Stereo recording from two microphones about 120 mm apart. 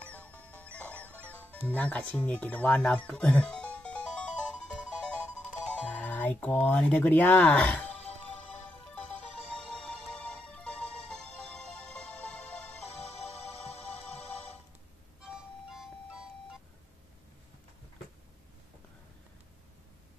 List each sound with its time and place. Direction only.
0.1 s music: 10° left (ahead or behind)
5.5 s speech: 10° left (ahead or behind)
8.9 s music: 10° left (ahead or behind)
13.7 s music: 60° left (ahead or behind)
15.2 s music: 5° right (ahead or behind)